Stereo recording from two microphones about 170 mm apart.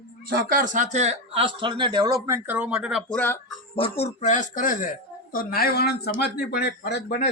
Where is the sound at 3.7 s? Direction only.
35° left (ahead or behind); by 4.9 s 50° left (ahead or behind).